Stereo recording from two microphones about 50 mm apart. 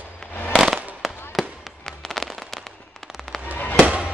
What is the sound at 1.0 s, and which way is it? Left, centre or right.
Fireworks, centre.